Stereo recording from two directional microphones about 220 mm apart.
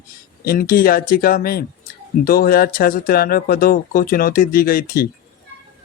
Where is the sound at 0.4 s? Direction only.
40° left (ahead or behind).